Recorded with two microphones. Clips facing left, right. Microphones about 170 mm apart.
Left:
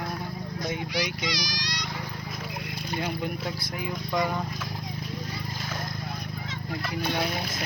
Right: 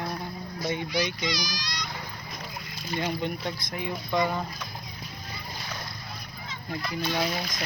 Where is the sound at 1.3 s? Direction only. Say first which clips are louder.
Even; 80° left.